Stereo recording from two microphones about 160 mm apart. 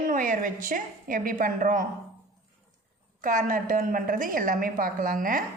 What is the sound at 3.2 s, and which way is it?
Speech, 55° right (ahead or behind).